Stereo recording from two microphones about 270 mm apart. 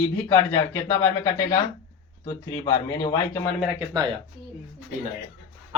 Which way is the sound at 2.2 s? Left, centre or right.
Centre.